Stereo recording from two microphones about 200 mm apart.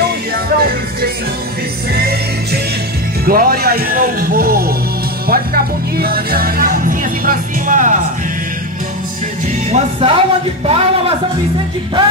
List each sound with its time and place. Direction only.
0.6 s music: 50° right (ahead or behind)
3.3 s speech: 45° right (ahead or behind)
9.7 s a man's voice: 30° right (ahead or behind)